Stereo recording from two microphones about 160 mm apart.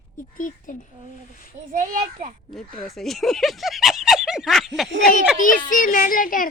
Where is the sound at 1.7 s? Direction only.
55° right (ahead or behind).